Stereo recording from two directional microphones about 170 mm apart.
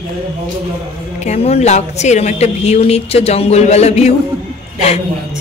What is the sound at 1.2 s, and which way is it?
Speech, 40° left (ahead or behind).